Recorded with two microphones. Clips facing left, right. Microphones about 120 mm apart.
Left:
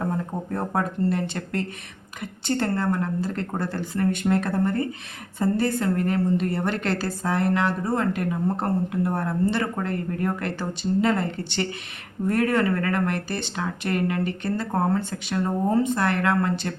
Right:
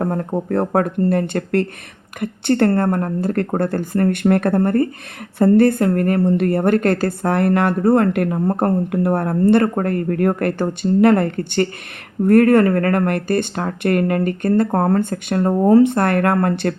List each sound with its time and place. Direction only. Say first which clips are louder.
0.0 s a woman's voice: right 7 dB; 60° right (ahead or behind)
15.6 s a woman's voice: right 11 dB; 70° right (ahead or behind)